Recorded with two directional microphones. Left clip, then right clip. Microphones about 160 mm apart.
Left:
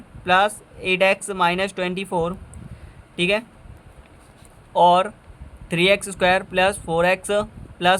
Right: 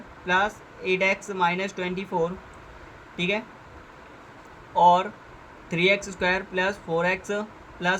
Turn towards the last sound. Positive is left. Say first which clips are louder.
# left 7 dB
turn(degrees=45)  # may be behind; listen again after turning